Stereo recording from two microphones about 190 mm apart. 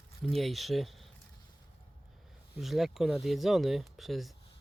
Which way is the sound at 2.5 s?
Centre (ahead or behind).